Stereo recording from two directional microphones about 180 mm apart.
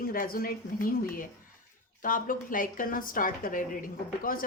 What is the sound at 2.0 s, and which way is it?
A woman's voice, 50° left (ahead or behind).